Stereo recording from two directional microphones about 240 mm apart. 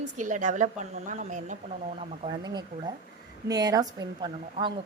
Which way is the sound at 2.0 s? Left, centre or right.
Centre.